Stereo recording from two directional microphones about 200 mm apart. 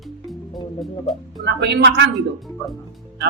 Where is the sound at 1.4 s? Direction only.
55° right (ahead or behind).